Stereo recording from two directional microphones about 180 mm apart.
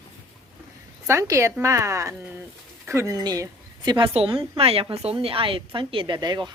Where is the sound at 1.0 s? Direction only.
15° right (ahead or behind).